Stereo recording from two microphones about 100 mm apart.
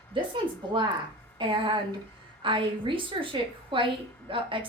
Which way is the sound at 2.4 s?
55° right (ahead or behind).